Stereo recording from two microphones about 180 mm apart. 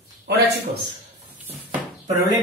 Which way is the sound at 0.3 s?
70° right (ahead or behind).